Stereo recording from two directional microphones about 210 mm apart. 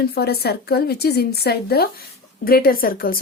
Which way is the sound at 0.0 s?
50° left (ahead or behind).